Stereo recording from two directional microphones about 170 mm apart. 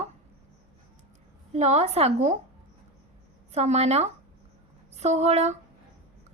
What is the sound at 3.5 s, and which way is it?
A woman's voice, 40° right (ahead or behind).